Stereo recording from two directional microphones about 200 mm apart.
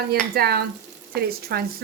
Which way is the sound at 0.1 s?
50° right (ahead or behind).